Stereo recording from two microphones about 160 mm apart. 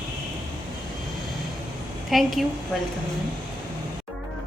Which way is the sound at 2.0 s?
Centre (ahead or behind).